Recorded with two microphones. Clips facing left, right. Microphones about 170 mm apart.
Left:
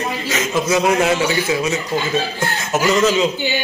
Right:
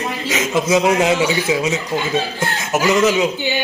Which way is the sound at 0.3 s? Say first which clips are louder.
Right 2 dB; 20° right (ahead or behind).